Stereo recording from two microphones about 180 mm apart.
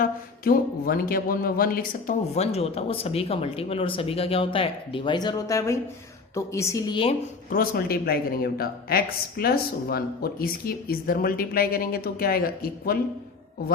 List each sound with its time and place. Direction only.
0.0 s speech: 55° left (ahead or behind)
2.3 s a woman's voice: 35° left (ahead or behind)
7.5 s speech: 55° left (ahead or behind)